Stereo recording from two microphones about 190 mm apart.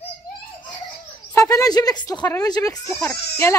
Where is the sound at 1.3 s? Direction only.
20° left (ahead or behind).